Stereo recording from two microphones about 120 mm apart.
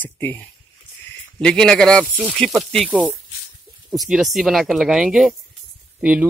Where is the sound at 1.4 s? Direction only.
5° left (ahead or behind).